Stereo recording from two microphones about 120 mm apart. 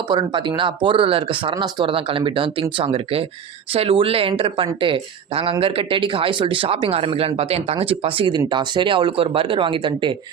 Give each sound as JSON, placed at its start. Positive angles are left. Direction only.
{"t": 0.1, "sound": "speech", "side_deg": -40}